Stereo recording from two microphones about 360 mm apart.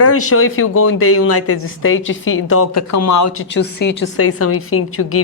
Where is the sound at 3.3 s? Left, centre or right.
Left.